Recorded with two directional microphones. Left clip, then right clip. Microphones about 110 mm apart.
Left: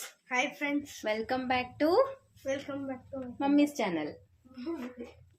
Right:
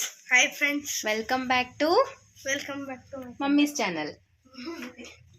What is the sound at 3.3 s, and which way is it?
Speech, 25° right (ahead or behind).